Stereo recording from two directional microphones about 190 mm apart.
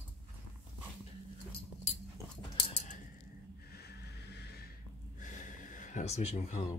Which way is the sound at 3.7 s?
55° left (ahead or behind).